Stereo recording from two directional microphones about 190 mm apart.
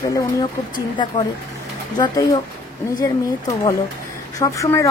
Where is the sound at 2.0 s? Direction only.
20° left (ahead or behind).